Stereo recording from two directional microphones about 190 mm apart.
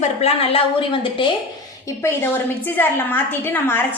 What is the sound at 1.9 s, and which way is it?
A woman's voice, 15° left (ahead or behind).